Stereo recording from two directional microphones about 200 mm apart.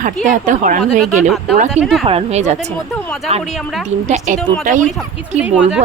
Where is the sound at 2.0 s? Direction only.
30° right (ahead or behind).